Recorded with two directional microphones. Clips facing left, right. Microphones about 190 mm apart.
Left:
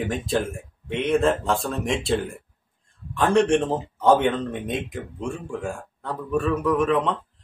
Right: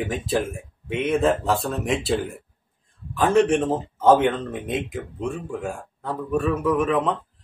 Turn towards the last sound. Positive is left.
turn(degrees=-5)  # may be behind; listen again after turning